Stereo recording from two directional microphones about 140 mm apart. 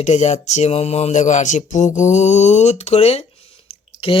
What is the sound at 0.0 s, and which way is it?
Speech, 55° left (ahead or behind).